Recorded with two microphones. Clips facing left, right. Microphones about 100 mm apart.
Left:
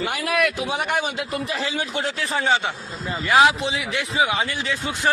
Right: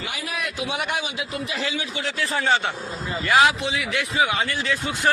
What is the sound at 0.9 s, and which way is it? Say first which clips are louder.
Speech: left 4 dB; 55° left (ahead or behind).